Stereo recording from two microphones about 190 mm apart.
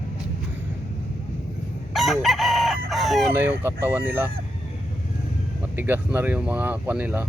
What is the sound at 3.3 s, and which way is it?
Speech, 10° right (ahead or behind).